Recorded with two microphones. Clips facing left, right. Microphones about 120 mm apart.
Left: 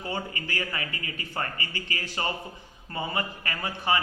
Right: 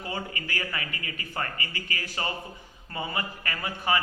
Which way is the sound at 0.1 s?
30° left (ahead or behind).